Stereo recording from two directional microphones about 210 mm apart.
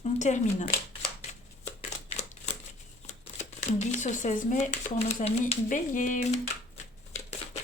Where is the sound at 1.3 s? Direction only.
35° left (ahead or behind).